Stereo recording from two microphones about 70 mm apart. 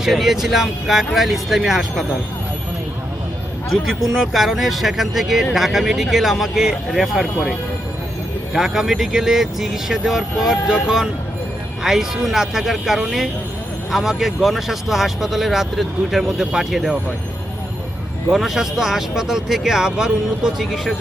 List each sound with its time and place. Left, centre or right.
0.0 s speech: centre
3.7 s speech: centre
8.5 s speech: centre
18.3 s speech: centre